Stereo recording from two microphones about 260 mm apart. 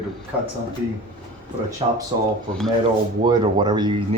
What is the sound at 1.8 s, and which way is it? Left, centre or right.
Speech, right.